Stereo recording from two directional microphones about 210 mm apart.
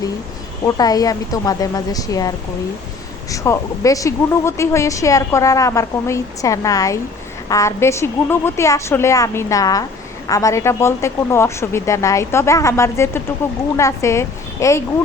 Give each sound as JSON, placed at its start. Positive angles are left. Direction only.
{"t": 0.6, "sound": "speech", "side_deg": 15}
{"t": 3.3, "sound": "a woman's voice", "side_deg": 15}